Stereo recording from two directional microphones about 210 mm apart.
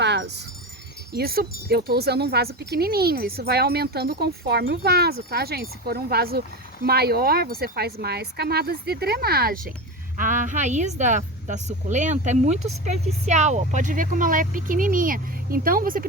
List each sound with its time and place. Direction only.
0.0 s wind chime: 55° right (ahead or behind)
1.1 s speech: 45° right (ahead or behind)